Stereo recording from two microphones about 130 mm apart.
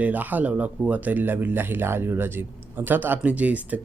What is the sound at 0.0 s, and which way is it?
Speech, 15° right (ahead or behind).